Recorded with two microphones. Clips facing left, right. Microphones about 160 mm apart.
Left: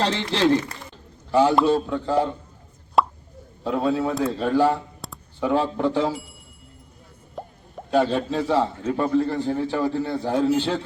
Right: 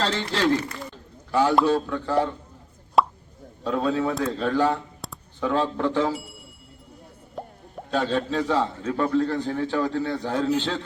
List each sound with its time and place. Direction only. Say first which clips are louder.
0.0 s a man's voice: left 2 dB; 20° left (ahead or behind)
3.0 s plop: even; centre (ahead or behind)
3.6 s a man's voice: left 1 dB; 15° left (ahead or behind)
4.9 s a sound: even; centre (ahead or behind)
5.4 s a man's voice: left 2 dB; 15° left (ahead or behind)
7.4 s plop: even; centre (ahead or behind)
7.9 s a man's voice: left 4 dB; 15° left (ahead or behind)